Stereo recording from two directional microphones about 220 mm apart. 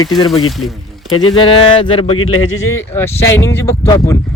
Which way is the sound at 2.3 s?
65° left (ahead or behind).